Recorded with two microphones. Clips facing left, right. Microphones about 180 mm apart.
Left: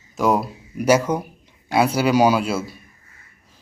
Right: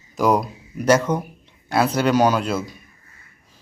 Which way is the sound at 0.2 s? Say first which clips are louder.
Right 1 dB; centre (ahead or behind).